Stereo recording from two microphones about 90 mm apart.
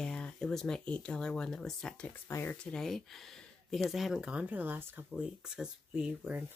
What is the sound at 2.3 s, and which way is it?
Speech, 25° left (ahead or behind).